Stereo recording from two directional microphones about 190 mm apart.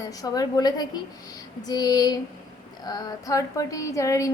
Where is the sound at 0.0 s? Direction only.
20° left (ahead or behind).